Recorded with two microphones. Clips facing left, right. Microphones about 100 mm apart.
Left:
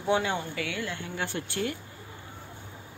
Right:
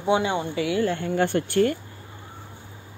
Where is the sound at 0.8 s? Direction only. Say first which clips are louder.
Right 11 dB; 45° right (ahead or behind).